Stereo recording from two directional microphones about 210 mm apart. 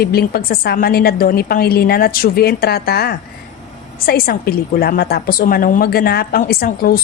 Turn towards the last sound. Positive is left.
turn(degrees=45)  # may be behind; listen again after turning